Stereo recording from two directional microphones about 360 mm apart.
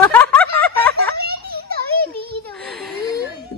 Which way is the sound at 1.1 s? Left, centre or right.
Right.